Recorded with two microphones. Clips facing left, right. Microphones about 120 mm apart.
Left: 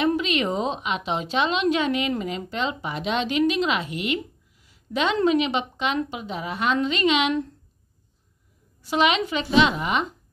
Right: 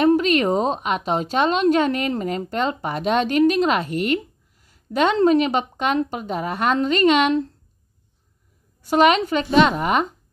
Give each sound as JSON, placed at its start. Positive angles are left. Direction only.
{"t": 0.0, "sound": "a woman's voice", "side_deg": -45}
{"t": 8.8, "sound": "a woman's voice", "side_deg": -45}